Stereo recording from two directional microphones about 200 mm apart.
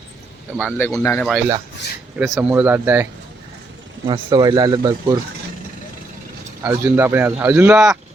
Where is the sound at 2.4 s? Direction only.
10° right (ahead or behind).